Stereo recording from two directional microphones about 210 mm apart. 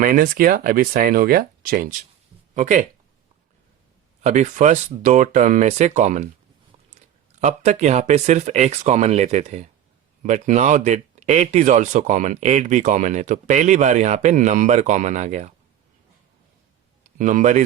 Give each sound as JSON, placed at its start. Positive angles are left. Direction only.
{"t": 0.0, "sound": "speech", "side_deg": -45}
{"t": 4.2, "sound": "speech", "side_deg": -35}
{"t": 7.4, "sound": "speech", "side_deg": -35}
{"t": 17.2, "sound": "speech", "side_deg": -40}